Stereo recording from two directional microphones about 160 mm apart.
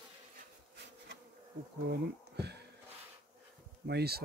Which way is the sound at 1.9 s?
90° right.